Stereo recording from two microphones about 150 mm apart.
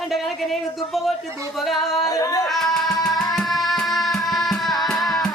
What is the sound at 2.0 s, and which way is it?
Singing, 25° left (ahead or behind).